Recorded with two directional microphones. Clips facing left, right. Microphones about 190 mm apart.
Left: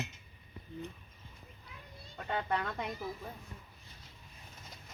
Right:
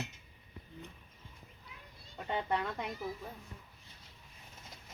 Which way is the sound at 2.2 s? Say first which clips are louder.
Even; 15° right (ahead or behind).